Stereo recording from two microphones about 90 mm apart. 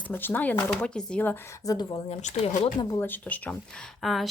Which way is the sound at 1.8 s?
90° left.